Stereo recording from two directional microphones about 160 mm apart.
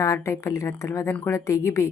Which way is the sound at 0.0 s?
20° left (ahead or behind).